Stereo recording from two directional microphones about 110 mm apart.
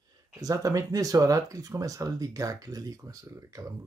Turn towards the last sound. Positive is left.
turn(degrees=-30)  # may be behind; listen again after turning